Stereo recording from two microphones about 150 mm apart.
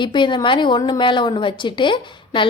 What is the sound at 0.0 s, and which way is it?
A woman's voice, 30° left (ahead or behind).